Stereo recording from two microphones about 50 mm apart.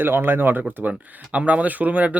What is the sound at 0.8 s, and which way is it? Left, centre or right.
Speech, right.